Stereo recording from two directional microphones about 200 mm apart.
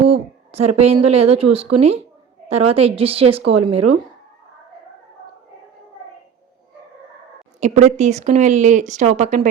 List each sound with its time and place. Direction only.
0.0 s a woman's voice: 30° right (ahead or behind)
7.6 s speech: 35° right (ahead or behind)